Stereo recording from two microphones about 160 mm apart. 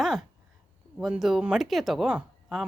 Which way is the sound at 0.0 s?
Centre (ahead or behind).